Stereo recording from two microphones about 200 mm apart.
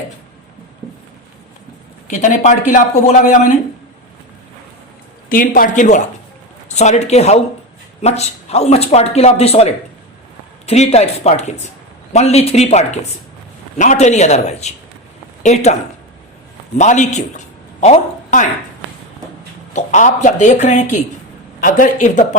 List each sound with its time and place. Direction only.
2.0 s speech: 35° left (ahead or behind)
5.3 s speech: 45° left (ahead or behind)
16.7 s a man's voice: 35° left (ahead or behind)
19.7 s speech: 35° left (ahead or behind)